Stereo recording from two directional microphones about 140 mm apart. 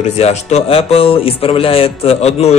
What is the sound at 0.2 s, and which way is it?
A man's voice, 50° left (ahead or behind).